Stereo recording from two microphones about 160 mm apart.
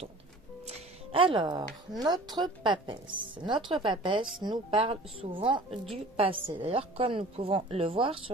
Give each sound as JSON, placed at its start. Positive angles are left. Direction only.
{"t": 0.7, "sound": "speech", "side_deg": -40}